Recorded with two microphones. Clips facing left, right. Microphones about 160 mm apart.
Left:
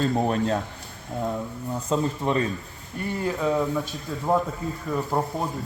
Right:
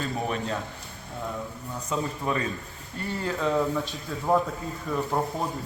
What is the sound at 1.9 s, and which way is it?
Speech, 25° left (ahead or behind).